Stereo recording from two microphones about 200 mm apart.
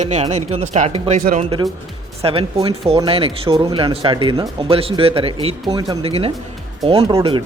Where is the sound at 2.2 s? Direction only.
30° right (ahead or behind).